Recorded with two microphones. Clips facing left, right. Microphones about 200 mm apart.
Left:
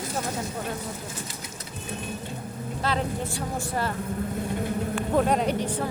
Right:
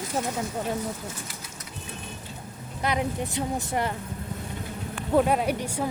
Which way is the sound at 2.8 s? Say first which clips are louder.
Right 1 dB; 15° right (ahead or behind).